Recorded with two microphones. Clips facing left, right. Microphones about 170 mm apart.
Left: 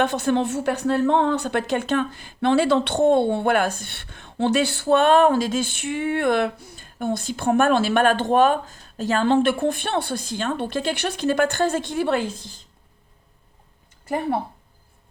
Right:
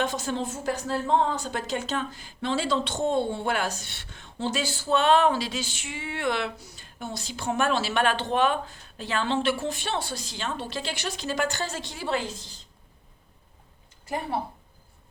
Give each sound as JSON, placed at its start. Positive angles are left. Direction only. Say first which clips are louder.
{"t": 0.0, "sound": "a woman's voice", "louder": "left 8 dB", "side_deg": 60}